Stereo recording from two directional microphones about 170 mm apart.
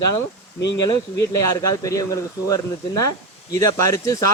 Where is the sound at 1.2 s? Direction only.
20° left (ahead or behind).